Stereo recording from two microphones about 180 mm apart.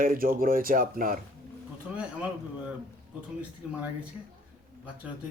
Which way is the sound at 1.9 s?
5° right (ahead or behind).